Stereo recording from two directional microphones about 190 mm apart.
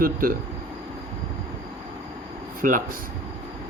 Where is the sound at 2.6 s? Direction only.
45° right (ahead or behind).